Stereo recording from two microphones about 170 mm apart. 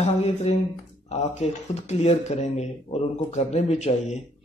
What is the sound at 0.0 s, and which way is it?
Speech, 35° left (ahead or behind).